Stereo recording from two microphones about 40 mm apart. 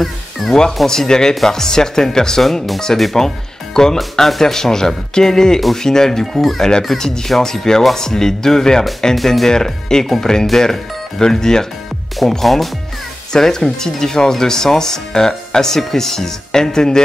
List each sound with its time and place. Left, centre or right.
0.0 s speech: centre
0.8 s speech: centre
2.4 s speech: centre
3.2 s speech: centre
9.5 s speech: centre
12.2 s speech: centre